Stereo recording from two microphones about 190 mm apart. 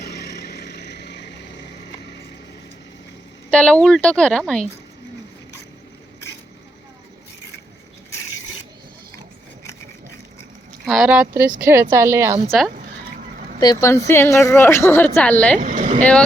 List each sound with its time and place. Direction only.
0.0 s vehicle: 60° left (ahead or behind)
3.5 s speech: 5° left (ahead or behind)
10.8 s a woman's voice: centre (ahead or behind)
12.5 s speech: centre (ahead or behind)
13.6 s a woman's voice: 20° left (ahead or behind)
15.5 s speech: 45° right (ahead or behind)